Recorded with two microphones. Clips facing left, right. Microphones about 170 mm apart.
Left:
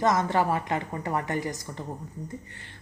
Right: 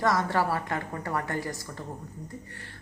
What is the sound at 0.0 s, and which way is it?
A woman's voice, 20° left (ahead or behind).